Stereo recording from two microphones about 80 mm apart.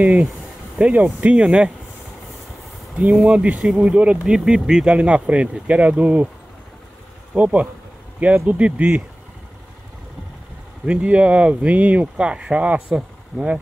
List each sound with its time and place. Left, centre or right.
0.7 s speech: centre
3.0 s speech: centre
7.3 s speech: centre
10.9 s speech: centre